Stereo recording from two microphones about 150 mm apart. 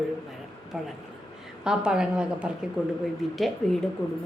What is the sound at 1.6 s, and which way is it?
A woman's voice, 5° right (ahead or behind).